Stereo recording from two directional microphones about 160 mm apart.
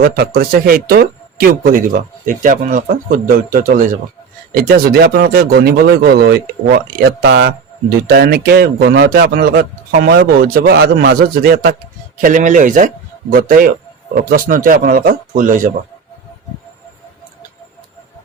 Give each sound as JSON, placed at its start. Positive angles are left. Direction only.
{"t": 0.0, "sound": "a man's voice", "side_deg": -70}
{"t": 4.5, "sound": "speech", "side_deg": -70}
{"t": 8.0, "sound": "a man's voice", "side_deg": -75}
{"t": 12.2, "sound": "speech", "side_deg": -50}